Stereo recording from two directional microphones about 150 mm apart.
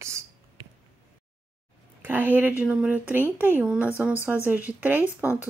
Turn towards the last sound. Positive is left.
turn(degrees=-10)  # may be behind; listen again after turning